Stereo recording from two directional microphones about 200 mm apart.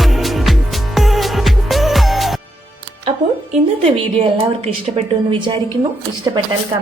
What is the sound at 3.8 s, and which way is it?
Speech, 25° right (ahead or behind).